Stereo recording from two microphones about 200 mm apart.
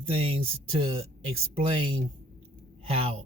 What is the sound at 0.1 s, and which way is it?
Speech, 30° right (ahead or behind).